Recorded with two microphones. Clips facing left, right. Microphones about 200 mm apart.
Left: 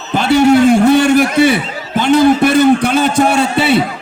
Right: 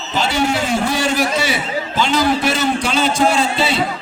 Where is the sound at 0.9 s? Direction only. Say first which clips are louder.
Left 9 dB; 60° left (ahead or behind).